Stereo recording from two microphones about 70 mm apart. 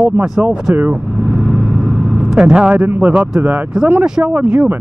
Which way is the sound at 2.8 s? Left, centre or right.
Right.